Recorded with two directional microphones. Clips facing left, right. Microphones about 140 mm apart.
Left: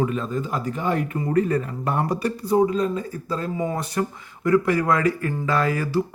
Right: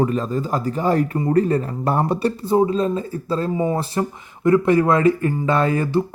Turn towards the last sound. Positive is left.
turn(degrees=-25)  # may be behind; listen again after turning